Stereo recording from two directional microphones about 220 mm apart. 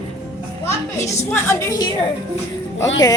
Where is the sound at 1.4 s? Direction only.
15° left (ahead or behind).